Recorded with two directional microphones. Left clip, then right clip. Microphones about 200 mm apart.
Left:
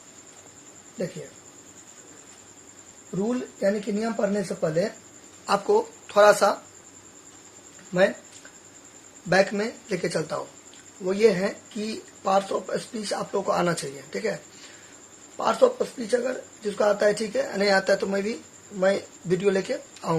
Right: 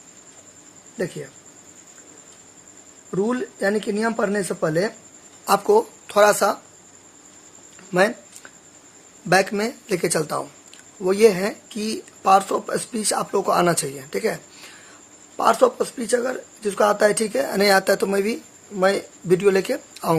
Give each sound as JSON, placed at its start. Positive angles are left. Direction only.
{"t": 3.2, "sound": "speech", "side_deg": -50}
{"t": 5.5, "sound": "speech", "side_deg": -35}
{"t": 9.3, "sound": "speech", "side_deg": -35}
{"t": 15.4, "sound": "speech", "side_deg": -35}